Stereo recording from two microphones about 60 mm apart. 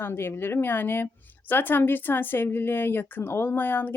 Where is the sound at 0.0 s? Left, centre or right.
Left.